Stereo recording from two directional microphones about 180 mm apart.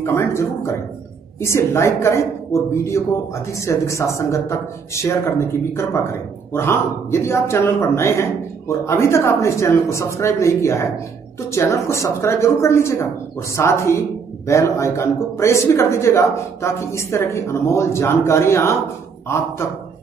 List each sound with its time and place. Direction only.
0.0 s speech: 15° left (ahead or behind)